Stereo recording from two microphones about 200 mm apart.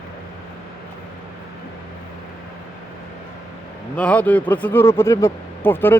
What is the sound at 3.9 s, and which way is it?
Speech, 5° left (ahead or behind).